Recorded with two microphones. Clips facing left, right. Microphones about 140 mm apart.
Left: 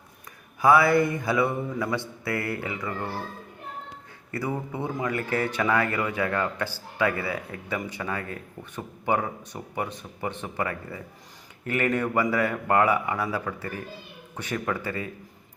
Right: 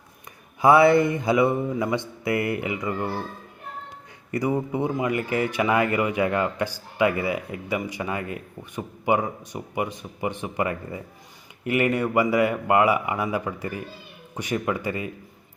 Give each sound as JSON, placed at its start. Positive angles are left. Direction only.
{"t": 0.6, "sound": "mantra", "side_deg": -25}
{"t": 4.3, "sound": "speech", "side_deg": -15}